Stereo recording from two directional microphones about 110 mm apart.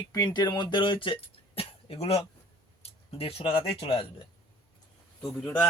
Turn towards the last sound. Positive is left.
turn(degrees=20)  # may be behind; listen again after turning